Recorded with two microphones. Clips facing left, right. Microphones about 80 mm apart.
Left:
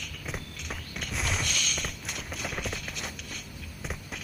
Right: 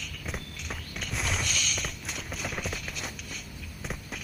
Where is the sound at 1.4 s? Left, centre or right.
Right.